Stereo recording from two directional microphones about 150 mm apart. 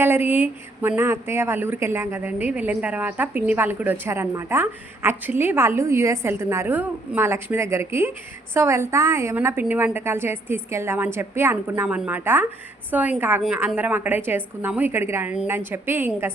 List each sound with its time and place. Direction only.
0.0 s speech: 15° right (ahead or behind)